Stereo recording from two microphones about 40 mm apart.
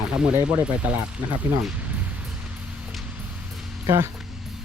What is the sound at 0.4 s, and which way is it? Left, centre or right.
Speech, right.